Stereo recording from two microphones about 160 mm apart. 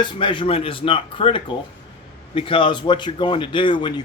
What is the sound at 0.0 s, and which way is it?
Speech, 30° left (ahead or behind).